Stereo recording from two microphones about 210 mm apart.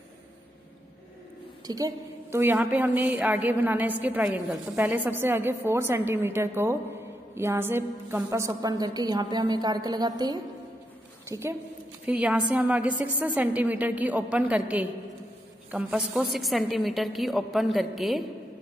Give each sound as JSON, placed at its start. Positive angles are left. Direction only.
{"t": 1.7, "sound": "a woman's voice", "side_deg": -15}